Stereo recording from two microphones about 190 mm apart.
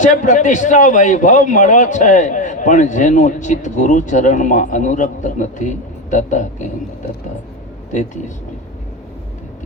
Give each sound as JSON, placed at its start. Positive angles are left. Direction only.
{"t": 0.0, "sound": "a man's voice", "side_deg": 40}
{"t": 7.9, "sound": "speech", "side_deg": 40}